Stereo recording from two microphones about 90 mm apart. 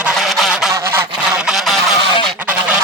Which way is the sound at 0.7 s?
25° right (ahead or behind).